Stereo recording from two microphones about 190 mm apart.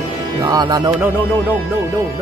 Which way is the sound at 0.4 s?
20° right (ahead or behind).